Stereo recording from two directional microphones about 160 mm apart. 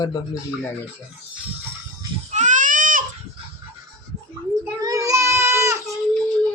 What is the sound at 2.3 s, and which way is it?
Baby cry, 50° right (ahead or behind).